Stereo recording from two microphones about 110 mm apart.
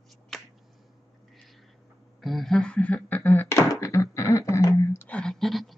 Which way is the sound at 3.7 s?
25° left (ahead or behind).